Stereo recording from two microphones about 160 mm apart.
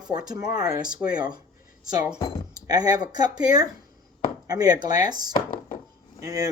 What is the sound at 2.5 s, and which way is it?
Speech, 25° right (ahead or behind).